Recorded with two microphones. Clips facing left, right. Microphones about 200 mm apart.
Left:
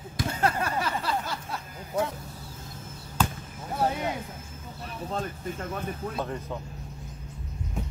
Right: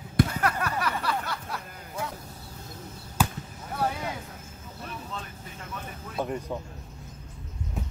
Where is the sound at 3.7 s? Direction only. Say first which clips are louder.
Left 2 dB; 20° left (ahead or behind).